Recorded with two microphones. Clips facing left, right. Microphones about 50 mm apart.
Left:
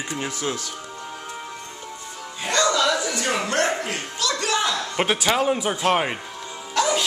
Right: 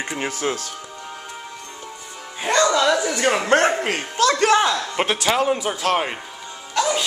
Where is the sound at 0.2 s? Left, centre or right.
Right.